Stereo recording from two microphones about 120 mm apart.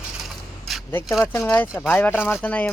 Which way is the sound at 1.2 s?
20° left (ahead or behind).